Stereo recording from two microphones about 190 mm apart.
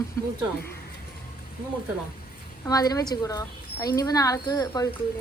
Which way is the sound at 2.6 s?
20° left (ahead or behind).